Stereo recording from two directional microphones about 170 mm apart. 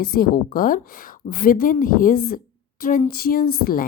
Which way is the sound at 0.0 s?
60° left (ahead or behind).